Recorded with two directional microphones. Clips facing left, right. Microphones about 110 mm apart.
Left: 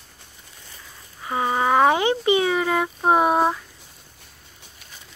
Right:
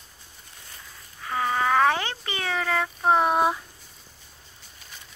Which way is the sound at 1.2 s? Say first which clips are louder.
Left 3 dB; 20° left (ahead or behind).